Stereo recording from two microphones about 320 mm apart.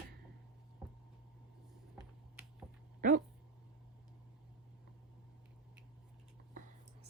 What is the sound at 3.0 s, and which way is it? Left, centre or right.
Dog, right.